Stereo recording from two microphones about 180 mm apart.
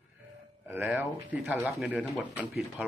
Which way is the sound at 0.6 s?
10° right (ahead or behind).